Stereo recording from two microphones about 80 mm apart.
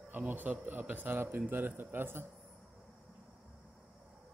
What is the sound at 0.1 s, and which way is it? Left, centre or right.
Speech, right.